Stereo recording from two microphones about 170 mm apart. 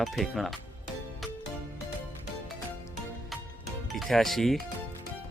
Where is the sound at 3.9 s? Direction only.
Centre (ahead or behind).